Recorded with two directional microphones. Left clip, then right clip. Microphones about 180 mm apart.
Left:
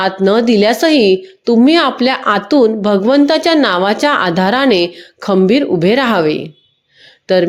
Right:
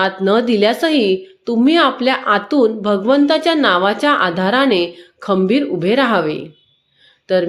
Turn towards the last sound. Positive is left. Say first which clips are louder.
# left 4 dB
turn(degrees=45)  # may be behind; listen again after turning